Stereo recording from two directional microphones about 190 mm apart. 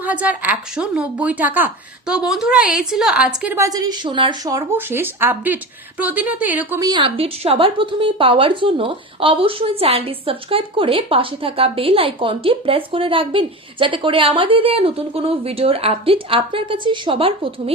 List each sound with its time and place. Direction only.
0.0 s a woman's voice: 10° right (ahead or behind); by 17.7 s 30° right (ahead or behind)